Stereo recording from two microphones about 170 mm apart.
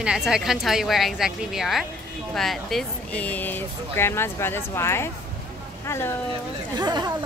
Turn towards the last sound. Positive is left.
turn(degrees=-25)  # may be behind; listen again after turning